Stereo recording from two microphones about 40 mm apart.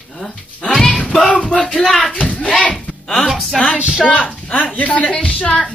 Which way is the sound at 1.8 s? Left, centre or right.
Centre.